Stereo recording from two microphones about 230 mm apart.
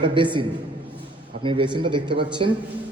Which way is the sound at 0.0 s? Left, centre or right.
Right.